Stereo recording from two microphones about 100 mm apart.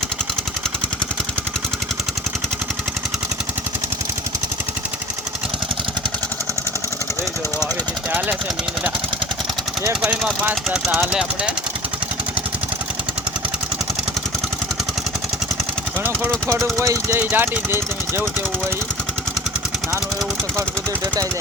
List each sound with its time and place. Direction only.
10.0 s speech: 10° right (ahead or behind)
16.7 s speech: 30° right (ahead or behind)